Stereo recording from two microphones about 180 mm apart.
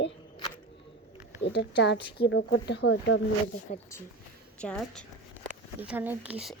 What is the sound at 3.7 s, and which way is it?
Speech, 40° left (ahead or behind).